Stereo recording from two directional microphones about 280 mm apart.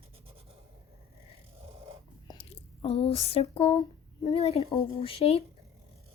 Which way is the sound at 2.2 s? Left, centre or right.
Centre.